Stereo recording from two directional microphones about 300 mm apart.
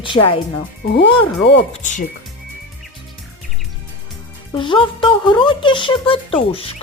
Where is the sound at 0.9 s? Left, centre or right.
Left.